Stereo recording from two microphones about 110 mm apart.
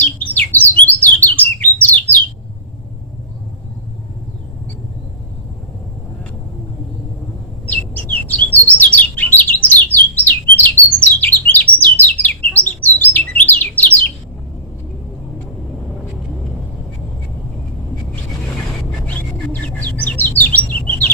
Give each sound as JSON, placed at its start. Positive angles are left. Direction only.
{"t": 0.0, "sound": "bird", "side_deg": 15}
{"t": 7.7, "sound": "chirp", "side_deg": 15}
{"t": 19.6, "sound": "bird", "side_deg": 15}